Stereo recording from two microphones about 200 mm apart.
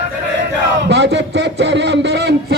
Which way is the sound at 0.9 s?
60° right (ahead or behind).